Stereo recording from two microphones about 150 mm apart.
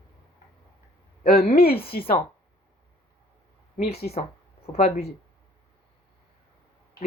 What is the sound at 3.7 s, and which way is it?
Speech, 45° left (ahead or behind).